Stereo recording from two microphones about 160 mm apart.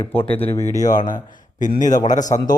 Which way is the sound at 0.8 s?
55° left (ahead or behind).